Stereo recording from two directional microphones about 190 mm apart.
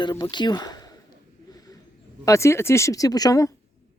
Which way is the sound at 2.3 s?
15° left (ahead or behind).